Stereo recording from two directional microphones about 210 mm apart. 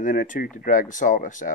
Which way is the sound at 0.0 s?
40° left (ahead or behind).